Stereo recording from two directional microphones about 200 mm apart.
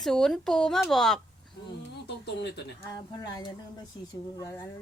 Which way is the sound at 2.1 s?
60° left (ahead or behind).